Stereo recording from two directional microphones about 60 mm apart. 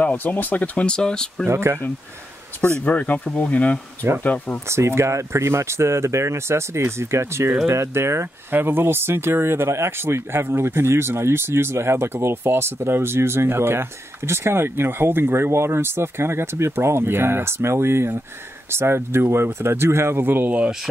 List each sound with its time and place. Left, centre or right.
0.0 s speech: left
1.5 s speech: right
2.8 s speech: left
4.6 s speech: right
8.5 s speech: right